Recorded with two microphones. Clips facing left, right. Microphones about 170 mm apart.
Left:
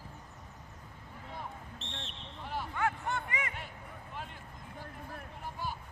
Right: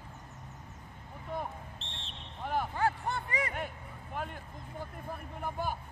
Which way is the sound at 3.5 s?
50° right (ahead or behind).